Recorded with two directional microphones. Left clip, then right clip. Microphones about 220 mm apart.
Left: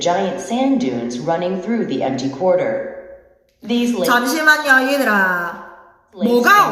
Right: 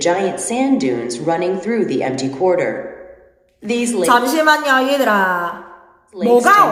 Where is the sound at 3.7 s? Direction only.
55° right (ahead or behind).